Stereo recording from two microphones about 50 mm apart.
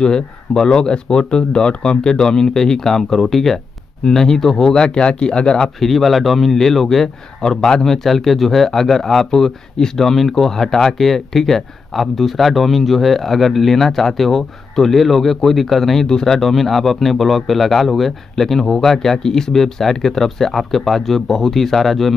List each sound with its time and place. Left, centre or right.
0.0 s speech: centre
5.8 s a man's voice: centre